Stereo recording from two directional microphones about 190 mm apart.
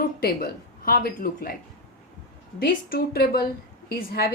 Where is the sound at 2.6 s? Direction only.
55° left (ahead or behind).